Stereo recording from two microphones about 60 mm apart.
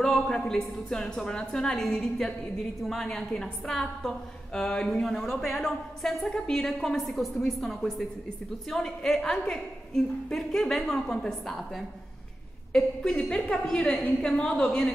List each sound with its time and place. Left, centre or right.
0.0 s a woman's voice: centre
3.1 s a woman's voice: centre
5.0 s a woman's voice: centre